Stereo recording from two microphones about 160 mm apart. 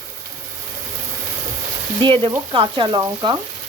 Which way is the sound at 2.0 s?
30° right (ahead or behind).